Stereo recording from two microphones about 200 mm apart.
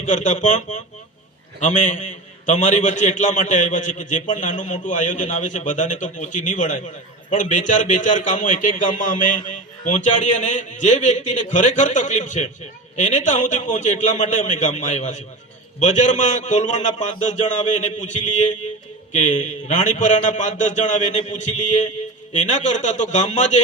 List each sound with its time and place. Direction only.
0.0 s a man's voice: 40° left (ahead or behind)